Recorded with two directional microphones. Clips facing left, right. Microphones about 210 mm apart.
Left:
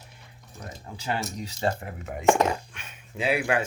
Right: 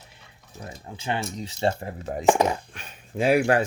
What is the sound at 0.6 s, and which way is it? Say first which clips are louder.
Speech: right 2 dB; 25° right (ahead or behind).